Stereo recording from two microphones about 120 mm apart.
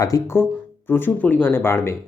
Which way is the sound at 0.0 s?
25° left (ahead or behind).